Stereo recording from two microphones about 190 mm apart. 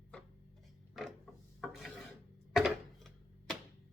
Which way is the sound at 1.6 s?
Centre (ahead or behind).